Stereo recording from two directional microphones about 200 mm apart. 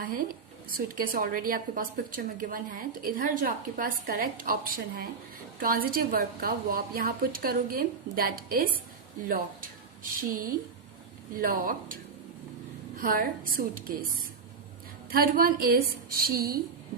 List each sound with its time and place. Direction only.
0.0 s a woman's voice: 45° right (ahead or behind)
13.0 s a woman's voice: 45° right (ahead or behind)
15.1 s a woman's voice: 45° right (ahead or behind)